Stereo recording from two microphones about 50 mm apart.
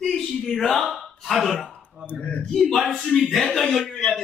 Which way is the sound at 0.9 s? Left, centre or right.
Centre.